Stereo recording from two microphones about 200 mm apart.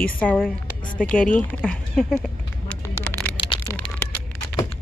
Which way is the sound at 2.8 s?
10° left (ahead or behind).